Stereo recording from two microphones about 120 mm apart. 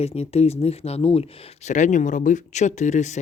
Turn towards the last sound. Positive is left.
turn(degrees=75)  # may be behind; listen again after turning